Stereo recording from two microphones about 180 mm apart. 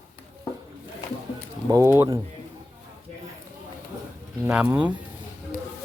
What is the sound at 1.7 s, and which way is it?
Speech, 15° right (ahead or behind).